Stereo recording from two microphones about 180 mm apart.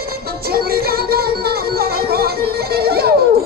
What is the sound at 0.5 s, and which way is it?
Music, 60° right (ahead or behind).